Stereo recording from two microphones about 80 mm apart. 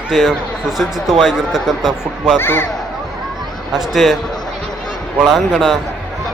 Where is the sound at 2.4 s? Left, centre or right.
Left.